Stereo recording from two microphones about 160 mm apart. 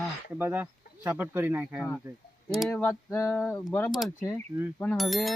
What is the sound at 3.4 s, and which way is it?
Speech, centre (ahead or behind).